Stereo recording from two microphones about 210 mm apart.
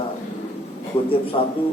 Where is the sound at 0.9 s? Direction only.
30° left (ahead or behind).